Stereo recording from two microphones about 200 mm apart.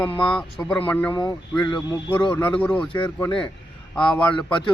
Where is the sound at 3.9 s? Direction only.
5° left (ahead or behind).